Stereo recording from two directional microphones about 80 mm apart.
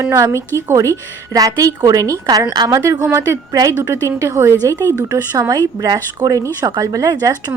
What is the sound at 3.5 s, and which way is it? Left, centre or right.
Speech, right.